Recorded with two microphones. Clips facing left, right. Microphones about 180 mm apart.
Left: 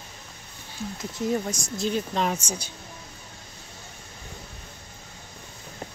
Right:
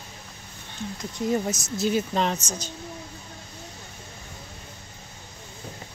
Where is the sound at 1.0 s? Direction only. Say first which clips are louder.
Right 1 dB; centre (ahead or behind).